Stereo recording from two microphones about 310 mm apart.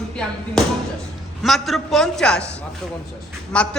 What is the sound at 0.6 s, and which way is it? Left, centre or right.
A woman's voice, centre.